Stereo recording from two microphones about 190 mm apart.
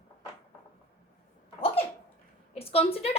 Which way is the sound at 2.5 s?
30° left (ahead or behind).